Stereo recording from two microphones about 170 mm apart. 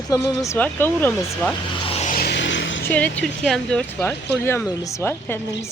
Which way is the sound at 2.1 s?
70° left (ahead or behind).